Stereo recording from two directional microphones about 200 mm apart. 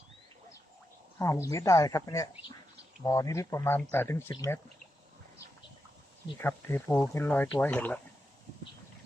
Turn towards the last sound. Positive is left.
turn(degrees=10)  # may be behind; listen again after turning